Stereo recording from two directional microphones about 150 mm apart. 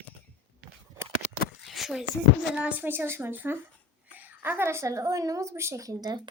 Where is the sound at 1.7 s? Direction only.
Centre (ahead or behind).